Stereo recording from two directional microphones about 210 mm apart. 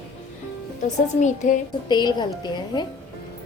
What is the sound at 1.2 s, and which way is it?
Speech, 35° left (ahead or behind).